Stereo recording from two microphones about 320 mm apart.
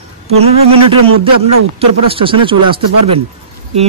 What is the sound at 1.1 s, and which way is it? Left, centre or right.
Speech, right.